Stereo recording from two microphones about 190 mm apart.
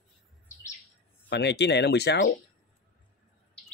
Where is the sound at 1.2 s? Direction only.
65° left (ahead or behind).